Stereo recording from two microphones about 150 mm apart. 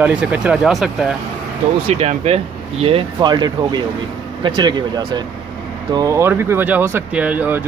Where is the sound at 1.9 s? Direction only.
45° right (ahead or behind).